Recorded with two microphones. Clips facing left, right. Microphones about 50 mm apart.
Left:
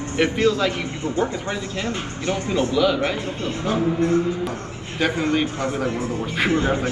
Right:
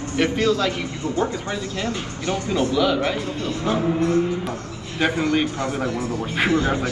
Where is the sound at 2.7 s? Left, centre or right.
Centre.